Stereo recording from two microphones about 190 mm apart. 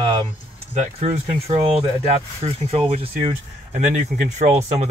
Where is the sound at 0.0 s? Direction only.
30° right (ahead or behind).